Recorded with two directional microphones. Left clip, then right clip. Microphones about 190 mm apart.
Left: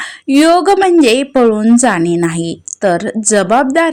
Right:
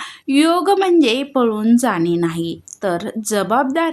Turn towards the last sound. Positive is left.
turn(degrees=25)  # may be behind; listen again after turning